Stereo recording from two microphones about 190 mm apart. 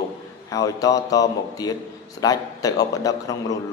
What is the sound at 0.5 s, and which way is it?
A man's voice, 20° left (ahead or behind).